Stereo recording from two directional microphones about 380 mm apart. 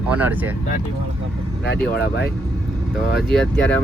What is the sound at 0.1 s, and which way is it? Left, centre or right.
Speech, centre.